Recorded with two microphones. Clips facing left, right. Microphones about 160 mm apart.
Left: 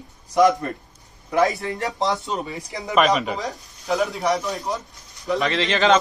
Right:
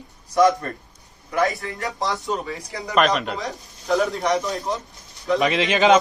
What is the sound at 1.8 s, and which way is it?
Speech, 20° left (ahead or behind).